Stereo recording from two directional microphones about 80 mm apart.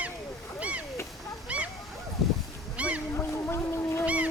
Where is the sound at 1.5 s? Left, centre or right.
Centre.